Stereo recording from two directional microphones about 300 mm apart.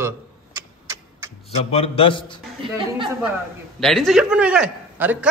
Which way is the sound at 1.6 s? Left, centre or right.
Centre.